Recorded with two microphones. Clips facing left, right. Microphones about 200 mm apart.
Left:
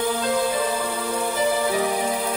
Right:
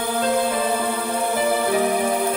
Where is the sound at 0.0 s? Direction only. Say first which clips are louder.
Right 1 dB; 55° right (ahead or behind).